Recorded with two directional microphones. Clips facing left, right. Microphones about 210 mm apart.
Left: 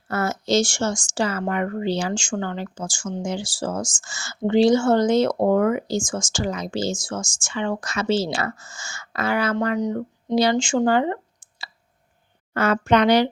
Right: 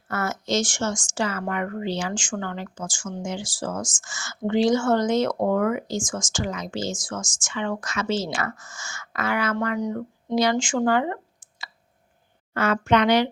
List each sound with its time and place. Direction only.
0.1 s speech: 30° left (ahead or behind)
9.6 s speech: 20° left (ahead or behind)
12.5 s speech: 40° left (ahead or behind)